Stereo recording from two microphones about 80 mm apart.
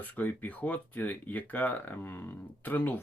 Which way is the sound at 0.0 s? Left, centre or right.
Left.